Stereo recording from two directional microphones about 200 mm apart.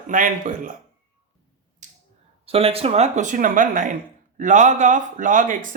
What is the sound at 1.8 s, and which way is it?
Finger snapping, 40° right (ahead or behind).